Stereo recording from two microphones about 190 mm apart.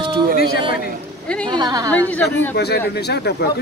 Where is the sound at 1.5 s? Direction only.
20° right (ahead or behind).